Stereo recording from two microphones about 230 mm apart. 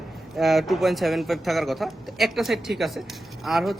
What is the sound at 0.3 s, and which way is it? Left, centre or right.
A man's voice, centre.